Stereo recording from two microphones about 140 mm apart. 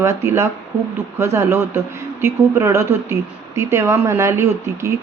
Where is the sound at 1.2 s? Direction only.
20° right (ahead or behind).